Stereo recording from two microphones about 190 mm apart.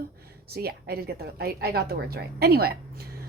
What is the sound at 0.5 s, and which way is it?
A woman's voice, 55° right (ahead or behind).